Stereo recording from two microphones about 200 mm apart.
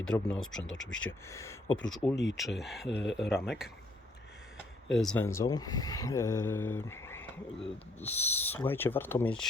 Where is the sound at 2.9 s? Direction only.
60° left (ahead or behind).